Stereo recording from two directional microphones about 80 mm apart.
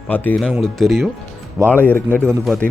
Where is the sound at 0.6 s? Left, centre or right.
Centre.